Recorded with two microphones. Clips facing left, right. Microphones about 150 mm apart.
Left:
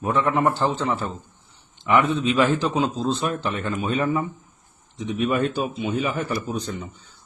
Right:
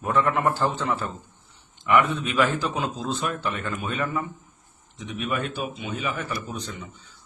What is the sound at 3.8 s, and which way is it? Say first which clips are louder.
A man's voice: left 5 dB; 40° left (ahead or behind).